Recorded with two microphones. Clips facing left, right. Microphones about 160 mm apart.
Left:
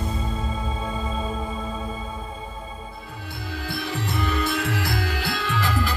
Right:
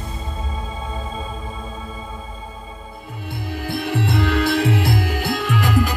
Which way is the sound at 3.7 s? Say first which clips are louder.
Right 7 dB; 60° right (ahead or behind).